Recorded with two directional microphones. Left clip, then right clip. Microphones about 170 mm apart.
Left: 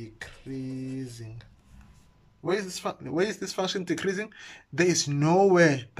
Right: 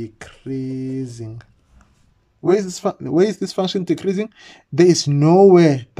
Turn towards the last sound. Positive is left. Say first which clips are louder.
# right 9 dB
turn(degrees=-30)  # may be behind; listen again after turning